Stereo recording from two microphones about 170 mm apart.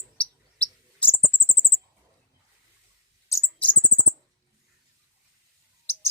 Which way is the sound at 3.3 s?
10° left (ahead or behind).